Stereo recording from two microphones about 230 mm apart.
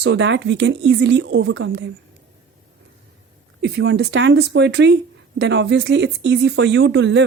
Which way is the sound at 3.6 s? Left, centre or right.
Right.